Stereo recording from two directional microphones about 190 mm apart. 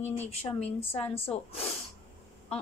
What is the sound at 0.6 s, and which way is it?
A woman's voice, 30° left (ahead or behind).